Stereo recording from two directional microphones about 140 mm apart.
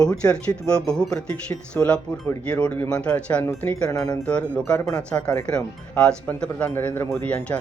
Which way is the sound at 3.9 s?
25° left (ahead or behind).